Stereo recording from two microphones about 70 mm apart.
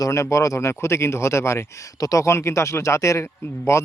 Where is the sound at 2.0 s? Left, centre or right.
Left.